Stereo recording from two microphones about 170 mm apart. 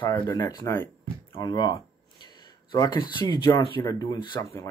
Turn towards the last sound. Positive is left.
turn(degrees=20)  # may be behind; listen again after turning